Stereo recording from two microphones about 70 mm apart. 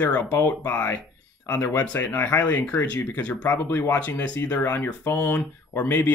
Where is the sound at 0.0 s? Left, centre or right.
Left.